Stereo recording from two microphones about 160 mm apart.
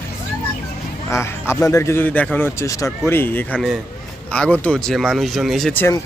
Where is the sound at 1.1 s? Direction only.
15° left (ahead or behind).